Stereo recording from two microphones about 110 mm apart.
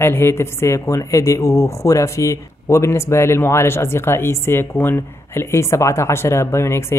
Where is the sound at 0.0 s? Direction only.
25° left (ahead or behind).